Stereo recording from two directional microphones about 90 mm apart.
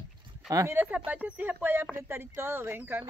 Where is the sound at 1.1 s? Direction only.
20° right (ahead or behind).